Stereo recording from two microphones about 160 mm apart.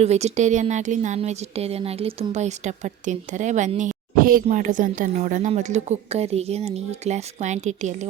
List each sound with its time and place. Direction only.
0.0 s speech: 45° right (ahead or behind)